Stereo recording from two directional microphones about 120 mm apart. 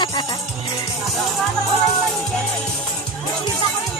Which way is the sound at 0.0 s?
40° left (ahead or behind).